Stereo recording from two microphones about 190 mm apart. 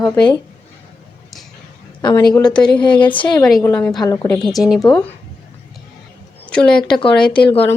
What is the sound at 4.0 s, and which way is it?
Speech, 20° left (ahead or behind).